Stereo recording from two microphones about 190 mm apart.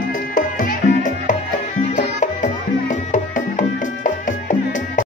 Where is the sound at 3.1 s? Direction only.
40° left (ahead or behind).